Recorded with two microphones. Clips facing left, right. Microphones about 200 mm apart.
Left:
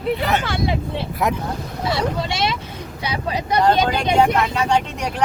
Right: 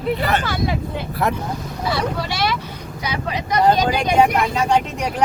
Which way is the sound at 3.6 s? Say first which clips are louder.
Right 1 dB; 10° right (ahead or behind).